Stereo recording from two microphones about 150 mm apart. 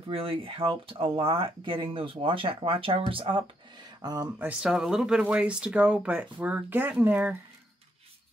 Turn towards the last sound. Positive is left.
turn(degrees=-10)  # may be behind; listen again after turning